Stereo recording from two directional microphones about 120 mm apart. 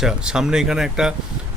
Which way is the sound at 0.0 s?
5° right (ahead or behind).